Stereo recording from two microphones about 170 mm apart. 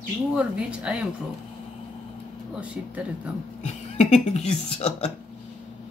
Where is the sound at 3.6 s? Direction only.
40° left (ahead or behind).